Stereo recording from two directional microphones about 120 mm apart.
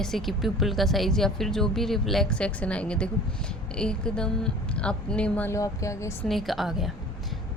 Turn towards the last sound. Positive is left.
turn(degrees=0)  # may be behind; listen again after turning